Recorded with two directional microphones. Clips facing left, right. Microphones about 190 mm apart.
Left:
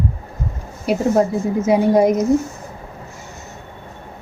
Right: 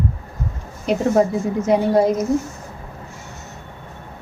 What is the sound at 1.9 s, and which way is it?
Speech, 15° left (ahead or behind).